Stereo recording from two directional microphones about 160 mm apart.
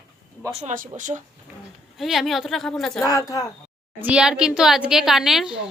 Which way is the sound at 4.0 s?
5° right (ahead or behind).